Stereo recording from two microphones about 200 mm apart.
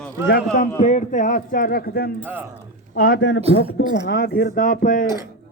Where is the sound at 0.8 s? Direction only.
35° left (ahead or behind).